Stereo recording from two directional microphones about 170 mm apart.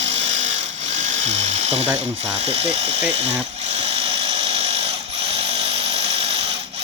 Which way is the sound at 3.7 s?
40° right (ahead or behind).